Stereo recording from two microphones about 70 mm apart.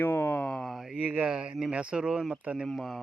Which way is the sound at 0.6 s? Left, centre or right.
Centre.